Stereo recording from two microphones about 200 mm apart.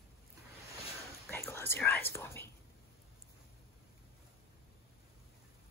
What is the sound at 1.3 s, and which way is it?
Whispering, 10° left (ahead or behind).